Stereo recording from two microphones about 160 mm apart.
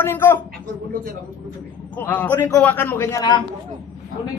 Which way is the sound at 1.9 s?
10° left (ahead or behind).